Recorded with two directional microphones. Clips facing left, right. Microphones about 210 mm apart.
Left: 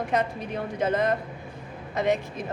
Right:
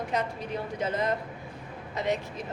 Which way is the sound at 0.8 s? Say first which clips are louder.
Left 5 dB; 55° left (ahead or behind).